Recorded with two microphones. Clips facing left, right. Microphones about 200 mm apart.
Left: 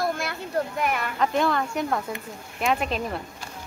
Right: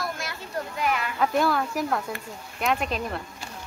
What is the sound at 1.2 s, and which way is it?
A woman's voice, 5° right (ahead or behind).